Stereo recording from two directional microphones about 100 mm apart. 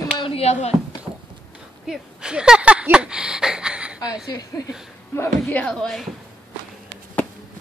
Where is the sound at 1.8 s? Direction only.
5° right (ahead or behind).